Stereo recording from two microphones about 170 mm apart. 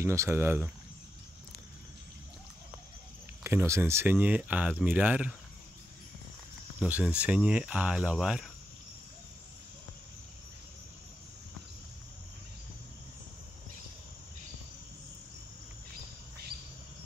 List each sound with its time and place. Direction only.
0.0 s speech: 15° right (ahead or behind)
3.4 s speech: 15° right (ahead or behind)
6.8 s speech: 5° right (ahead or behind)